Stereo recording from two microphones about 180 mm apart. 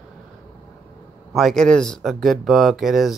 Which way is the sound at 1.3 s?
Centre (ahead or behind).